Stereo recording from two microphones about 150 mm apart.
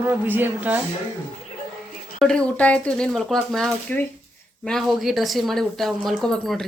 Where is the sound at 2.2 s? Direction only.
5° left (ahead or behind).